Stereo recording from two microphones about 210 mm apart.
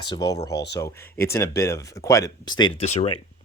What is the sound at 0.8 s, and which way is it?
Speech, 10° left (ahead or behind).